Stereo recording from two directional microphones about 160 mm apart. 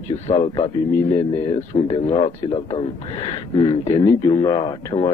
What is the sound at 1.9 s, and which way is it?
A man's voice, 30° left (ahead or behind).